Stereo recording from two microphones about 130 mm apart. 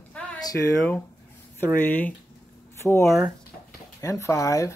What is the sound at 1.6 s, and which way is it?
Speech, 15° left (ahead or behind).